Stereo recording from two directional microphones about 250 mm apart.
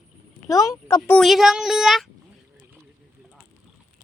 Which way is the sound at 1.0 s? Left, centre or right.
Centre.